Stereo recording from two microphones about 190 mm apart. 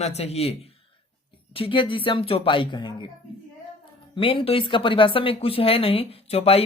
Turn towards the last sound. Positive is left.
turn(degrees=30)  # may be behind; listen again after turning